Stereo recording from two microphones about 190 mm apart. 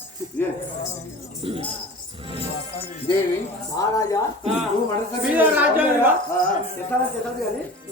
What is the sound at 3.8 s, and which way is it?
Speech, 15° left (ahead or behind).